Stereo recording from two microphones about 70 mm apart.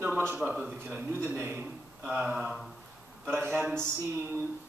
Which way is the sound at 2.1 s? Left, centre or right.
Centre.